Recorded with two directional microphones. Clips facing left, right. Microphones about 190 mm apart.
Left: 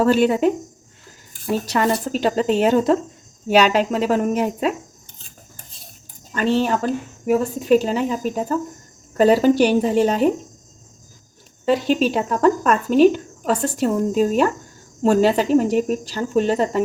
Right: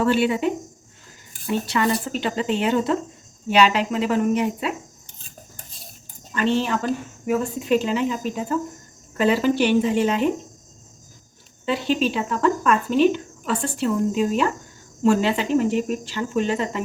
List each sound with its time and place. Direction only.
0.0 s speech: 40° left (ahead or behind)
1.6 s speech: 40° left (ahead or behind)
6.3 s speech: 40° left (ahead or behind)
11.6 s speech: 45° left (ahead or behind)